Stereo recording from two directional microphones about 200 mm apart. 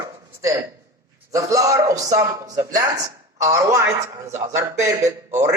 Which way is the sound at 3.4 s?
15° right (ahead or behind).